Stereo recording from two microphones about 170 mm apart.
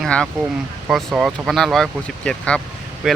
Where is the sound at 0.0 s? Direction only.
5° left (ahead or behind).